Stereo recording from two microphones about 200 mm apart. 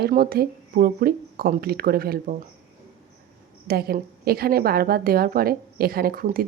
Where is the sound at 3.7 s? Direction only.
50° right (ahead or behind).